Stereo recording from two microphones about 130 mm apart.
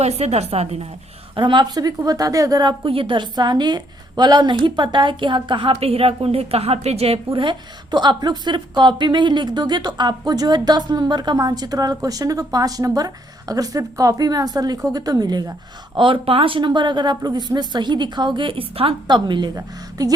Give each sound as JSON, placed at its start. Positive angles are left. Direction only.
{"t": 0.0, "sound": "a woman's voice", "side_deg": -55}
{"t": 1.4, "sound": "a woman's voice", "side_deg": -35}
{"t": 7.3, "sound": "a woman's voice", "side_deg": -35}
{"t": 16.0, "sound": "a woman's voice", "side_deg": -40}